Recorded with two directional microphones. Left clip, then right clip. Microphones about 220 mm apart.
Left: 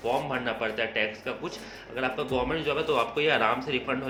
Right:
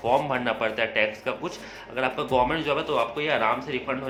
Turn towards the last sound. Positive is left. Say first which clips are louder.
# right 1 dB
turn(degrees=-5)  # may be behind; listen again after turning